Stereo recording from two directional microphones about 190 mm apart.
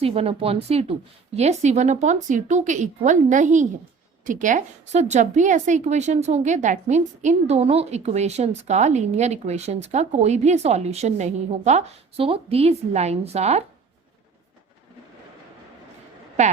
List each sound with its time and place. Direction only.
0.0 s a woman's voice: 30° right (ahead or behind)
16.4 s a woman's voice: 35° right (ahead or behind)